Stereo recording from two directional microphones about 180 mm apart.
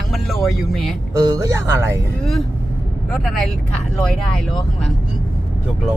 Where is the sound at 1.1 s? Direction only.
20° right (ahead or behind).